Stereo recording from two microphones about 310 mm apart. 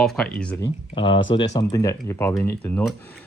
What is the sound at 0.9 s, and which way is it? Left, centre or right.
Speech, centre.